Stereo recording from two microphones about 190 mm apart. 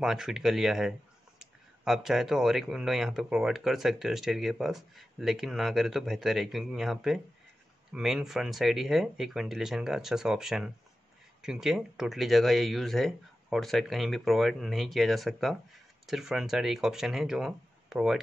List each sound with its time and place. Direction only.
0.0 s speech: centre (ahead or behind)